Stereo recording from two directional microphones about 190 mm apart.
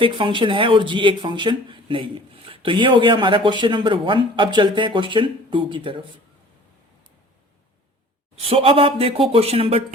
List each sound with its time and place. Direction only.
0.0 s speech: 25° right (ahead or behind)
8.4 s speech: 30° right (ahead or behind)